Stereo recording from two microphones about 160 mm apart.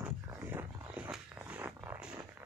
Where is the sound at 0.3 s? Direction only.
15° right (ahead or behind).